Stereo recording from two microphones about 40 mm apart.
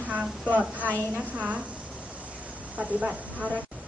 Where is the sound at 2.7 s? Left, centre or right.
Right.